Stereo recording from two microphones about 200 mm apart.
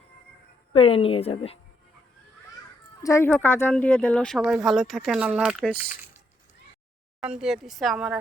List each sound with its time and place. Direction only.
0.7 s a woman's voice: 30° left (ahead or behind)
3.0 s speech: 15° left (ahead or behind); by 5.8 s 5° right (ahead or behind)
7.2 s speech: 5° right (ahead or behind)